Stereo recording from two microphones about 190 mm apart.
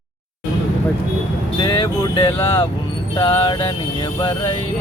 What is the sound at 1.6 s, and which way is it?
Speech, 20° left (ahead or behind).